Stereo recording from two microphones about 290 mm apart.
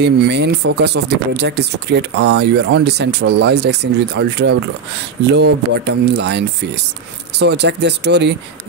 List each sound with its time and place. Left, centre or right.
0.0 s speech: right